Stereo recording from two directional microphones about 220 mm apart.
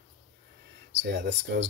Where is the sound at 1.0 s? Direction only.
50° right (ahead or behind).